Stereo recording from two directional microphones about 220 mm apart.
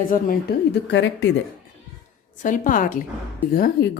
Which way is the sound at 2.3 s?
35° left (ahead or behind).